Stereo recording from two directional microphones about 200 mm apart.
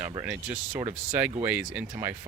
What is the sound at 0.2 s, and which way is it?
Speech, 10° right (ahead or behind).